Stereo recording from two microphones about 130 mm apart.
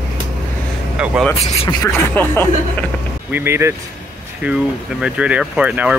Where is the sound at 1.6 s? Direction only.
20° left (ahead or behind).